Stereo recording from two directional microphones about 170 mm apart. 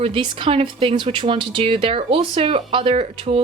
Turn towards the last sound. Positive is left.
turn(degrees=-35)  # may be behind; listen again after turning